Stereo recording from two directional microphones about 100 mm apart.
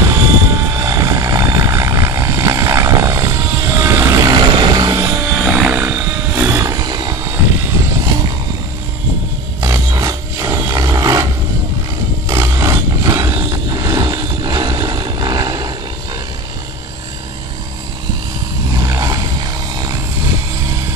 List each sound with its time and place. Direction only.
0.1 s vehicle: 25° right (ahead or behind); by 4.9 s 45° right (ahead or behind)
4.9 s helicopter: 25° right (ahead or behind)
5.9 s a sound: 25° right (ahead or behind); by 7.2 s 45° right (ahead or behind)
7.2 s vehicle: 30° right (ahead or behind)
9.6 s a sound: 35° right (ahead or behind)
12.3 s vehicle: 30° right (ahead or behind)
18.8 s vehicle: 35° right (ahead or behind)